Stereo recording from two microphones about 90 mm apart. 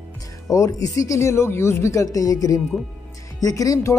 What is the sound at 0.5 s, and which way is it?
A woman's voice, 35° left (ahead or behind).